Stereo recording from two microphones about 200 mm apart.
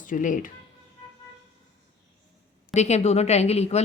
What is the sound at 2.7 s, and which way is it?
A woman's voice, 35° left (ahead or behind).